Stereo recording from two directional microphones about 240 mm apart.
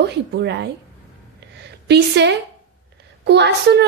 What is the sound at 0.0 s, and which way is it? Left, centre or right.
Speech, right.